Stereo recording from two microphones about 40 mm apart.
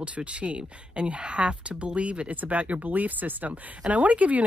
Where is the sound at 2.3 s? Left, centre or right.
Right.